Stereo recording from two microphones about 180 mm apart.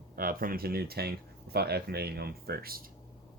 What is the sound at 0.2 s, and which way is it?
Speech, 50° right (ahead or behind).